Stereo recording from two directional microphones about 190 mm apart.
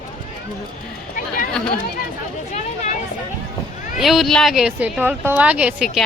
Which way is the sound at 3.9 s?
Centre (ahead or behind).